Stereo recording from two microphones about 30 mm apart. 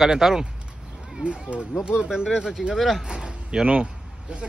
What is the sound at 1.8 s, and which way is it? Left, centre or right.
Speech, right.